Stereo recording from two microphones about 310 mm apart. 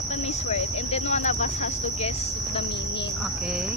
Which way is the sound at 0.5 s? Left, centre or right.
Centre.